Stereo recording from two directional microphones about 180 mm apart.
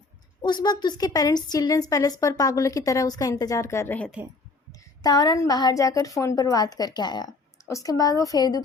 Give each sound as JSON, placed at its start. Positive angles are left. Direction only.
{"t": 0.4, "sound": "a woman's voice", "side_deg": 25}
{"t": 4.7, "sound": "a woman's voice", "side_deg": 20}